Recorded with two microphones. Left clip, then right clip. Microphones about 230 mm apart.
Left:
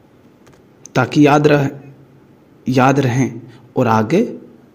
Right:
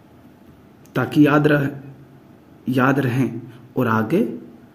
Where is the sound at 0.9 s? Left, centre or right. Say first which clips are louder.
Left 4 dB; left.